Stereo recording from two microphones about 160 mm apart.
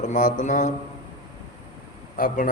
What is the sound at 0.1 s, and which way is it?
Speech, 50° left (ahead or behind).